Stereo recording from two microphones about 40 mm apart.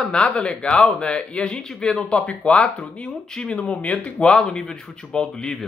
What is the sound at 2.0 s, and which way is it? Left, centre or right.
Speech, left.